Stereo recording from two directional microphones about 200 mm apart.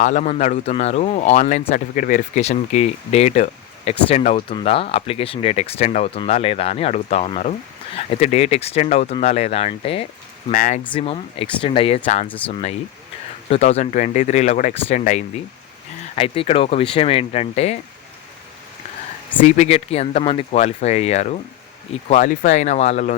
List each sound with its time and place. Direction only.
0.0 s speech: 40° left (ahead or behind)
10.5 s speech: 40° left (ahead or behind)
10.9 s speech: 30° left (ahead or behind)
19.4 s speech: 35° left (ahead or behind)